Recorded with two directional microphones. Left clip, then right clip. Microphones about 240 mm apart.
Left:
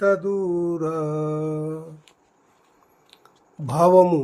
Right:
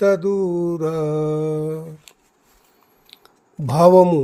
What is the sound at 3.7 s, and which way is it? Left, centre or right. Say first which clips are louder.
Speech: right 3 dB; right.